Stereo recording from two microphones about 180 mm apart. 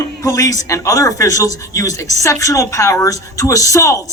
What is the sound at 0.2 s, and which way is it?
Speech, 20° left (ahead or behind).